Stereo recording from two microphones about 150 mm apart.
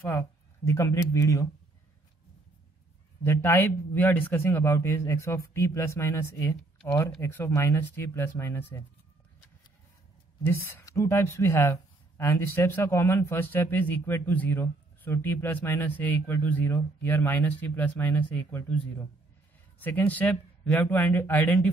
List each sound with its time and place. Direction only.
0.7 s speech: 20° left (ahead or behind)
3.3 s speech: 15° left (ahead or behind)
10.4 s speech: 20° left (ahead or behind)